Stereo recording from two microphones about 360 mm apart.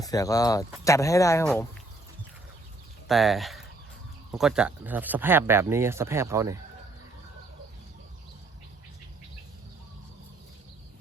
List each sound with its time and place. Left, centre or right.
0.0 s speech: centre
3.1 s speech: centre